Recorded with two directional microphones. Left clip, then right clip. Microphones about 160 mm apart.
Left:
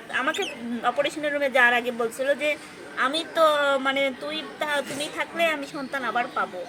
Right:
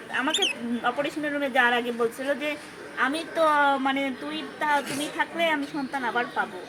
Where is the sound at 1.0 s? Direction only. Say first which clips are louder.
Left 3 dB; 15° left (ahead or behind).